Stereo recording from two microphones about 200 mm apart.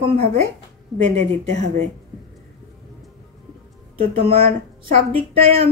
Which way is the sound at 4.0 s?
30° right (ahead or behind).